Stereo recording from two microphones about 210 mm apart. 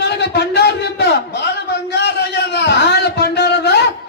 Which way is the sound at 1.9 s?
55° left (ahead or behind).